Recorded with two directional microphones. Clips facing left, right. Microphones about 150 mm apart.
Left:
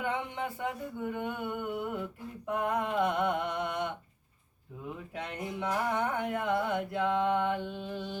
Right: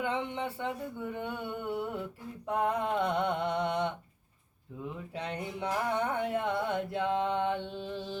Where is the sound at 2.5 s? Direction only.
30° right (ahead or behind).